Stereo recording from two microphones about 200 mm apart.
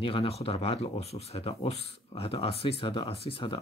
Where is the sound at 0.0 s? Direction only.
30° left (ahead or behind).